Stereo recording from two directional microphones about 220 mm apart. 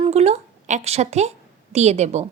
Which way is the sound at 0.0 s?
30° right (ahead or behind).